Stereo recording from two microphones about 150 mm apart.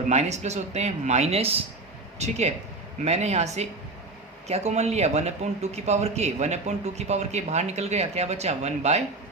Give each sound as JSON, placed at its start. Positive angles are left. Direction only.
{"t": 0.1, "sound": "speech", "side_deg": -50}